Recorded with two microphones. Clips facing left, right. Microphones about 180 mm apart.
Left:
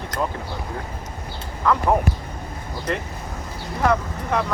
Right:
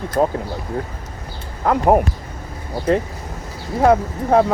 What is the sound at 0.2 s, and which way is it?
Speech, 45° right (ahead or behind).